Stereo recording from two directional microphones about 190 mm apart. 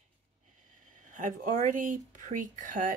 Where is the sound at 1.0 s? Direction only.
45° right (ahead or behind).